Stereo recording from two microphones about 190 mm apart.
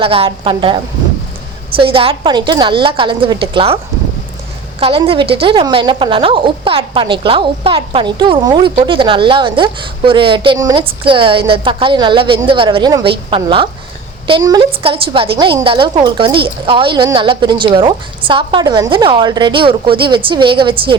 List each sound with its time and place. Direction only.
0.0 s a woman's voice: 30° right (ahead or behind)
4.8 s a woman's voice: 30° right (ahead or behind)